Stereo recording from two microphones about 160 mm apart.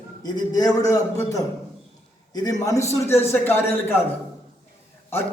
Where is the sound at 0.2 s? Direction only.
25° left (ahead or behind).